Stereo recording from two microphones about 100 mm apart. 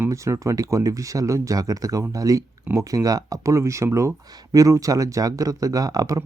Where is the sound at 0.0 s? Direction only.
30° right (ahead or behind).